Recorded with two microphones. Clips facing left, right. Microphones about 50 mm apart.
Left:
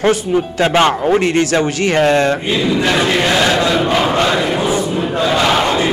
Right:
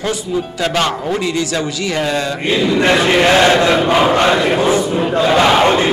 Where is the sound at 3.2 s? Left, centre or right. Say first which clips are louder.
Right 3 dB; right.